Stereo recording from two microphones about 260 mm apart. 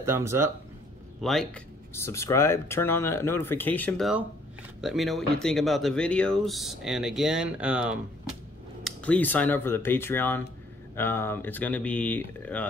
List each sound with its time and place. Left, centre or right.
0.0 s speech: centre
1.2 s speech: centre